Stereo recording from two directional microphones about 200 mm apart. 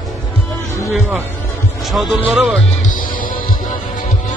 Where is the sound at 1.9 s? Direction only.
Centre (ahead or behind).